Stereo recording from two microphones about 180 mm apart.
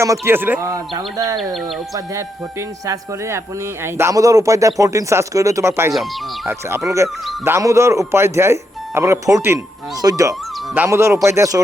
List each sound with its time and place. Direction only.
0.0 s speech: 15° right (ahead or behind)
5.9 s speech: centre (ahead or behind)
6.5 s speech: 15° right (ahead or behind)